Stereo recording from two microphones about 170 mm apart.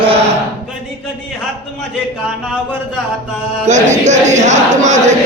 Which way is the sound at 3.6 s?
45° right (ahead or behind).